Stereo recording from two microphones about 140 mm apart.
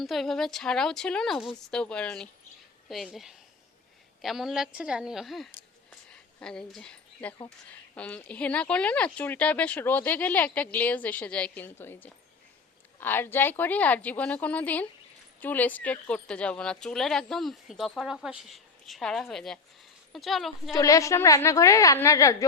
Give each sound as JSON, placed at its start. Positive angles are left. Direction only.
{"t": 0.0, "sound": "a woman's voice", "side_deg": 0}
{"t": 20.7, "sound": "a woman's voice", "side_deg": 20}